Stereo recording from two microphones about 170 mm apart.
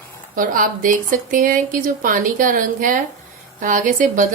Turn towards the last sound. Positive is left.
turn(degrees=-50)  # may be behind; listen again after turning